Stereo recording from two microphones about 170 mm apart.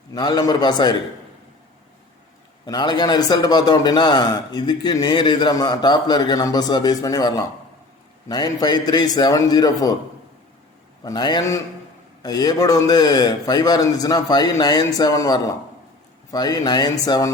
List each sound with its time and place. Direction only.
0.1 s a man's voice: 25° left (ahead or behind)
2.6 s a man's voice: 25° left (ahead or behind)
11.0 s a man's voice: 25° left (ahead or behind)